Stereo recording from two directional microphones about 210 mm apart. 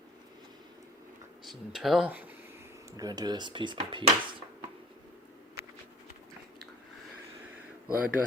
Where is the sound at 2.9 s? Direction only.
20° right (ahead or behind).